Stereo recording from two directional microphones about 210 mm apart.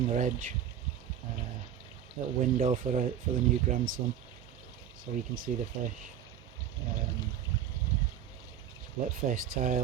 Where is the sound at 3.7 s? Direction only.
40° right (ahead or behind).